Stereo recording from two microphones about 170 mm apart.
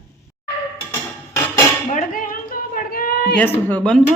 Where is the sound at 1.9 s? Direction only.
50° left (ahead or behind).